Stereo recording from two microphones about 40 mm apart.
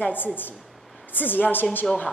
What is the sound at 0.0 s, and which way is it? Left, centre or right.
A woman's voice, left.